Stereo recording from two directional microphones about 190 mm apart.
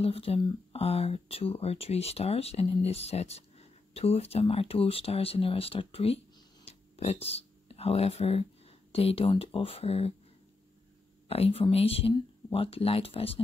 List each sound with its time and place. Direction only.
0.0 s speech: 30° left (ahead or behind)
11.2 s speech: 30° left (ahead or behind)